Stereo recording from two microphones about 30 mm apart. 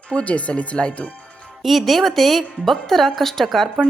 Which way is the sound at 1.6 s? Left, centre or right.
Centre.